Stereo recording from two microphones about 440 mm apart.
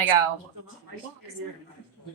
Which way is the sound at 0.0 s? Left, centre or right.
Right.